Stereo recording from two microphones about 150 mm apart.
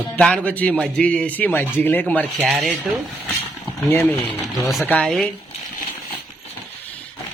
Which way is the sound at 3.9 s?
15° left (ahead or behind).